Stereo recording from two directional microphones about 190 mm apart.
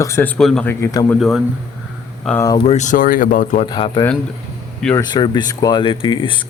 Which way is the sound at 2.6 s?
35° left (ahead or behind).